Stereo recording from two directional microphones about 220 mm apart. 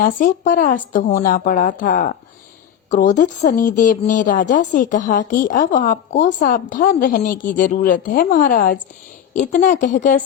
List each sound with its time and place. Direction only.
0.0 s a woman's voice: 40° left (ahead or behind)